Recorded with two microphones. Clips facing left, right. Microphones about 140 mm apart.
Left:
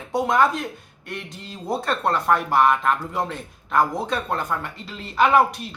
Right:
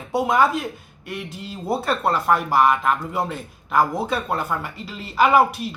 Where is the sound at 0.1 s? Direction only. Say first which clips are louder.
Right 1 dB; 5° right (ahead or behind).